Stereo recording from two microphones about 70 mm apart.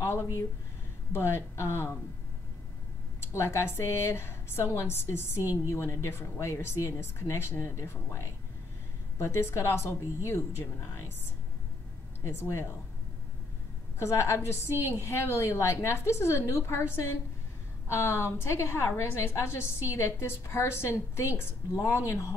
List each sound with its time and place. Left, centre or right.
1.1 s a woman's voice: left
3.3 s a woman's voice: left
12.3 s a woman's voice: left
13.9 s a woman's voice: left